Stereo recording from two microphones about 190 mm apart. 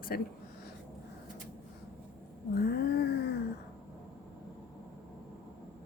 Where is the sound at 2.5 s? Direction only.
55° left (ahead or behind).